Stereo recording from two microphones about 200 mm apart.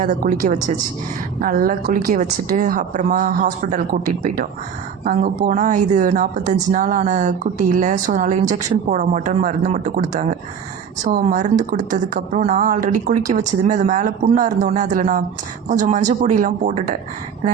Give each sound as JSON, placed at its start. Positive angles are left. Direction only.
{"t": 0.0, "sound": "speech", "side_deg": -40}